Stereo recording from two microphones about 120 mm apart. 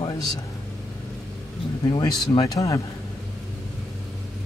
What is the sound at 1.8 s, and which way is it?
Speech, 35° left (ahead or behind).